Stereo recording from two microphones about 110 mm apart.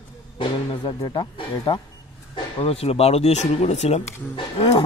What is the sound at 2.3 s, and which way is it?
Speech, 60° left (ahead or behind).